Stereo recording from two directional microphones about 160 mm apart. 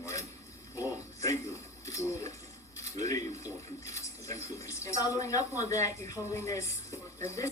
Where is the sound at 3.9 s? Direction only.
20° left (ahead or behind).